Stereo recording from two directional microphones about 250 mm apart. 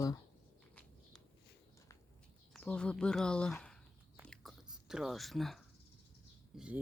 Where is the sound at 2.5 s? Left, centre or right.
Centre.